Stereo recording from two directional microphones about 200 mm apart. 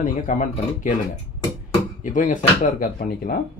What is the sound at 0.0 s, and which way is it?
Speech, 40° left (ahead or behind).